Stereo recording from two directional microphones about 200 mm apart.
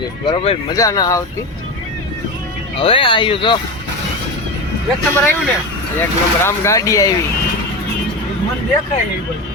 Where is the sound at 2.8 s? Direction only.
25° left (ahead or behind).